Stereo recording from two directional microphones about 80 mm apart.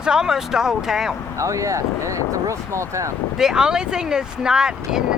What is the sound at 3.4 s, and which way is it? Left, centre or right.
Speech, centre.